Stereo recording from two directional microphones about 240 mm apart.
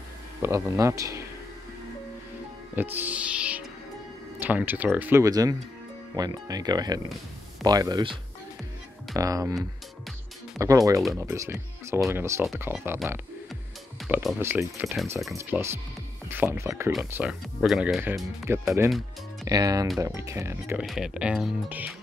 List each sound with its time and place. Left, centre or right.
0.4 s speech: centre
2.7 s speech: centre
10.6 s speech: centre
15.3 s speech: centre